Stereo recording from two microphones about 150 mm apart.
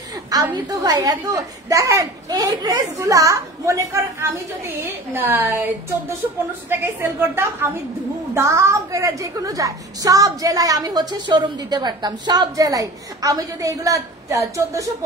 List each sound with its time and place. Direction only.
0.3 s a woman's voice: 25° right (ahead or behind)